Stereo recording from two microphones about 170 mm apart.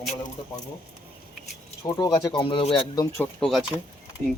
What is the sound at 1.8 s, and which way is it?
Speech, 20° left (ahead or behind).